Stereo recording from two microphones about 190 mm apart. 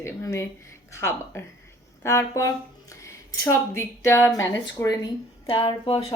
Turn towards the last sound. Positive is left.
turn(degrees=25)  # may be behind; listen again after turning